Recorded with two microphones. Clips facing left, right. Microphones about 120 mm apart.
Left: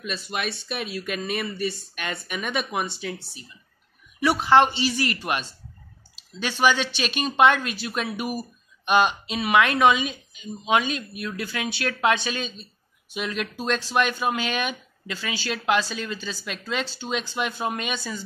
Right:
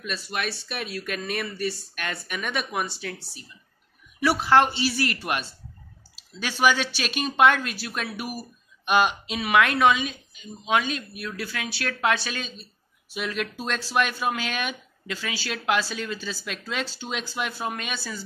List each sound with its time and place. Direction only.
0.0 s speech: centre (ahead or behind)